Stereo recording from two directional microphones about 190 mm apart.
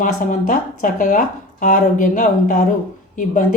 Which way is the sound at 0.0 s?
45° left (ahead or behind).